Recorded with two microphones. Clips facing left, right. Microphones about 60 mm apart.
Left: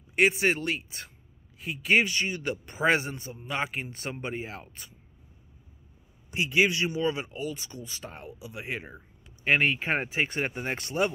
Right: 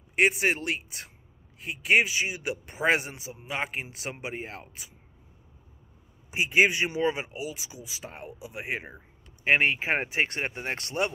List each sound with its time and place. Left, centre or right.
0.1 s a man's voice: centre
6.3 s speech: right
7.3 s a man's voice: centre
8.2 s a man's voice: right; by 11.1 s centre